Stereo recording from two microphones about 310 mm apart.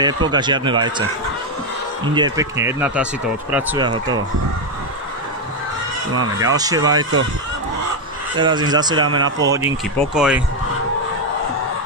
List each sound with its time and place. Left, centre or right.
0.0 s speech: centre
2.1 s speech: centre
6.3 s speech: centre
8.4 s speech: centre
9.0 s speech: right
9.4 s speech: centre